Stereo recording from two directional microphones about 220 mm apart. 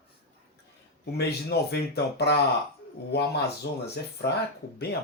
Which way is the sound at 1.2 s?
45° left (ahead or behind).